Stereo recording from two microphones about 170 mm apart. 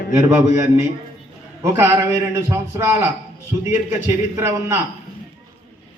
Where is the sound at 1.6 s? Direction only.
15° right (ahead or behind).